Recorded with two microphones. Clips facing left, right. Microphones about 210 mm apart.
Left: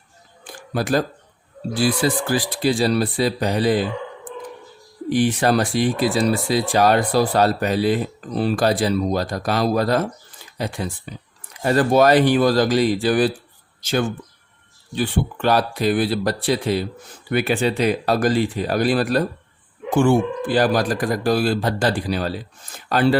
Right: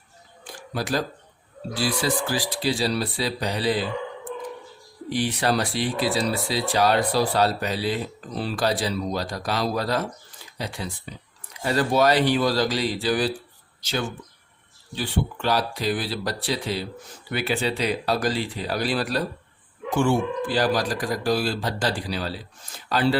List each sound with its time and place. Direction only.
0.7 s speech: 55° left (ahead or behind)
5.0 s speech: 50° left (ahead or behind)
14.9 s speech: 55° left (ahead or behind)